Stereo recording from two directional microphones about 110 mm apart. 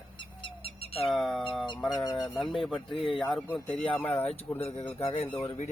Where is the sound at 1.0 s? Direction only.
Centre (ahead or behind).